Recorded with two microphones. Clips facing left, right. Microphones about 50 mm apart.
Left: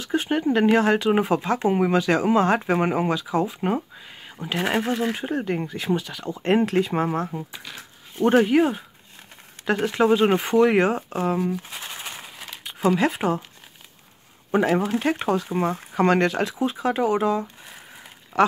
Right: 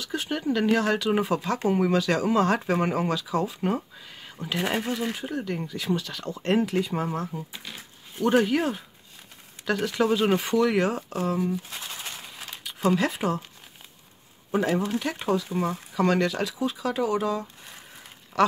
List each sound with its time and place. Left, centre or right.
0.0 s speech: left
6.6 s speech: left
8.2 s speech: left
11.3 s speech: left
11.8 s a sound: left
13.2 s speech: centre
14.5 s speech: left